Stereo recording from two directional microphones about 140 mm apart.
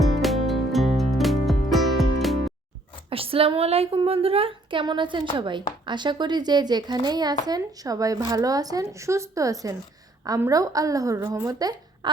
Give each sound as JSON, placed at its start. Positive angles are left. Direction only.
{"t": 0.2, "sound": "music", "side_deg": 0}
{"t": 3.1, "sound": "a woman's voice", "side_deg": -40}